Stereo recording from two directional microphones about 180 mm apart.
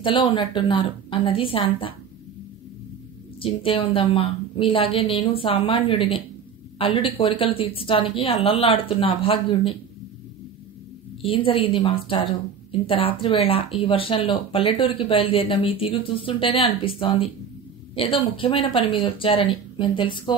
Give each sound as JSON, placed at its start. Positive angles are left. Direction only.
{"t": 0.0, "sound": "speech", "side_deg": 25}
{"t": 3.3, "sound": "a woman's voice", "side_deg": 30}
{"t": 11.2, "sound": "a woman's voice", "side_deg": 30}